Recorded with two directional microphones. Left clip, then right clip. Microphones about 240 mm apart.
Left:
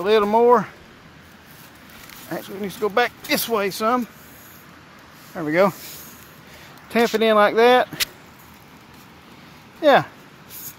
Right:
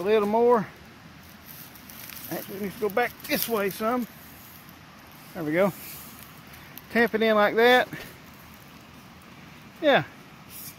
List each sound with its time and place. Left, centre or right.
0.0 s speech: centre
2.3 s speech: centre
5.3 s speech: centre
6.9 s speech: centre
9.8 s speech: centre